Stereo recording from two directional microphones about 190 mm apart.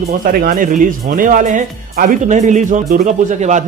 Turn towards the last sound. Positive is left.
turn(degrees=-40)  # may be behind; listen again after turning